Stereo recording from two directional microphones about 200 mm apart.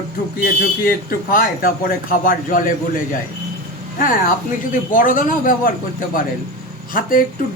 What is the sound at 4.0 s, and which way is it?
Speech, 40° left (ahead or behind).